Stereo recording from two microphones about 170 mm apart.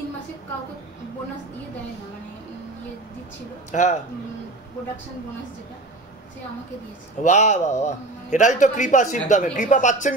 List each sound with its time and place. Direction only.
3.7 s a man's voice: 45° left (ahead or behind)
7.2 s a man's voice: 45° left (ahead or behind)